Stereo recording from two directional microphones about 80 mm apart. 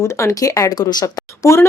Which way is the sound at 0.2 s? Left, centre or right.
Left.